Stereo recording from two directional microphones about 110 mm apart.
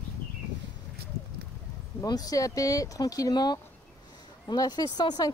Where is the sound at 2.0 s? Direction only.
35° left (ahead or behind).